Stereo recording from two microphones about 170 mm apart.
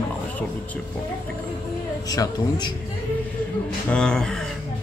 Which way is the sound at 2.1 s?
20° left (ahead or behind).